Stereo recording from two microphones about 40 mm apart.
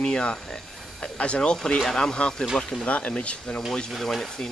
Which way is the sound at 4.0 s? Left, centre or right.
Centre.